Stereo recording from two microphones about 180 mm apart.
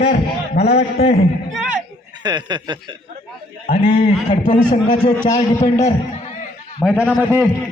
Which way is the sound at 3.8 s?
35° left (ahead or behind).